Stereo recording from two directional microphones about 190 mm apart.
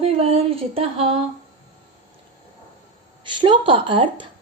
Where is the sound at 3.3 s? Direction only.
25° right (ahead or behind).